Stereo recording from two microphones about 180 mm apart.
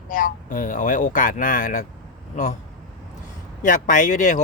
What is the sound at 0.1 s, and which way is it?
Speech, 50° left (ahead or behind).